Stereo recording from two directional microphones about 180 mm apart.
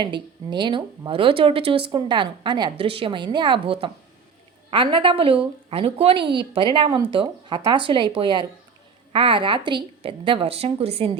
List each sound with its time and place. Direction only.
0.0 s a woman's voice: 25° right (ahead or behind)